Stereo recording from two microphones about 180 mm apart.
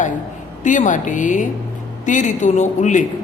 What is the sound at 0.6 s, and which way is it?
A woman's voice, 45° left (ahead or behind).